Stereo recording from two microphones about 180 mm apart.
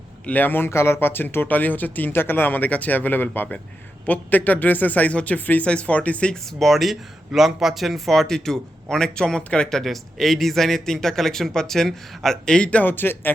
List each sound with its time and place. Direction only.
0.3 s speech: 10° left (ahead or behind)